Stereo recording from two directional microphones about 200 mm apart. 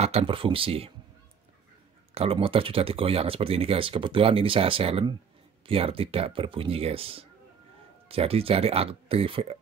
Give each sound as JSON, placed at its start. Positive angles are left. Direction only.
{"t": 0.0, "sound": "speech", "side_deg": -30}
{"t": 2.1, "sound": "speech", "side_deg": -30}